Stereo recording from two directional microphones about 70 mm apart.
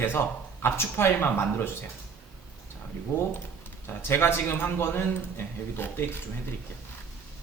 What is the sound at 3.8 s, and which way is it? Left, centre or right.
A man's voice, left.